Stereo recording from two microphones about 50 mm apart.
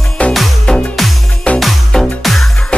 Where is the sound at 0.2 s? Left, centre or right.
Left.